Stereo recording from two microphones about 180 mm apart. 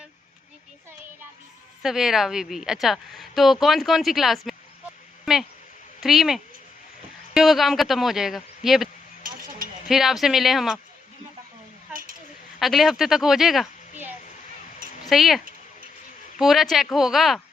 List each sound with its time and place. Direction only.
1.8 s speech: centre (ahead or behind)
5.2 s a sound: centre (ahead or behind)
6.0 s speech: centre (ahead or behind)
9.9 s speech: centre (ahead or behind)
12.5 s speech: centre (ahead or behind)
15.0 s speech: centre (ahead or behind)
16.4 s speech: centre (ahead or behind)